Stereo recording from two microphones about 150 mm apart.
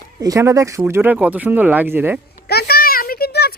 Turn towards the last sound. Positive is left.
turn(degrees=90)